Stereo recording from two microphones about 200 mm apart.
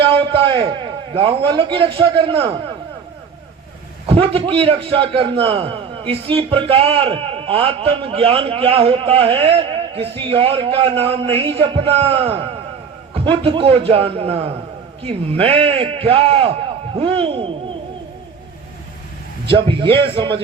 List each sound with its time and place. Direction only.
0.3 s a sound: 25° right (ahead or behind)
1.1 s a man's voice: 25° right (ahead or behind)
4.0 s a man's voice: 30° right (ahead or behind)
19.5 s a man's voice: 25° right (ahead or behind)